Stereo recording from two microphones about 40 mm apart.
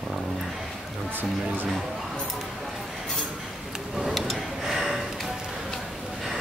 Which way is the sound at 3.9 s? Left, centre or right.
Centre.